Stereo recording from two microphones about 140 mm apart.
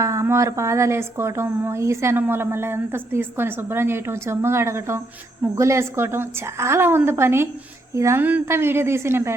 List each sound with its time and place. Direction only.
0.0 s a woman's voice: 20° right (ahead or behind)